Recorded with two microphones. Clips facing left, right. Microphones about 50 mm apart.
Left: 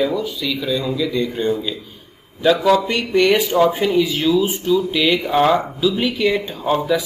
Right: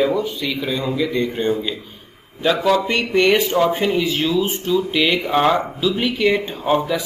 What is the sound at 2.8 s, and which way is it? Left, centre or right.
Speech, right.